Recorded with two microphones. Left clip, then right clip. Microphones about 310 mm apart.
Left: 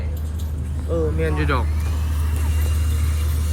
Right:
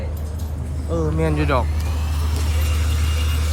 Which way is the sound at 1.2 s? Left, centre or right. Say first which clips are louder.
Right 3 dB; centre.